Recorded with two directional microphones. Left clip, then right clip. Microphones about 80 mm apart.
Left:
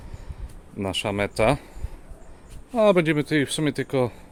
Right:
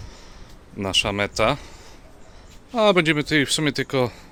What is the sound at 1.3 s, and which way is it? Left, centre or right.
Speech, left.